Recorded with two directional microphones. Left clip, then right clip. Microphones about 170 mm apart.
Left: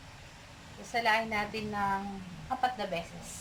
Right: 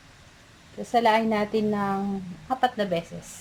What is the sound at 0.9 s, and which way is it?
A woman's voice, 50° right (ahead or behind).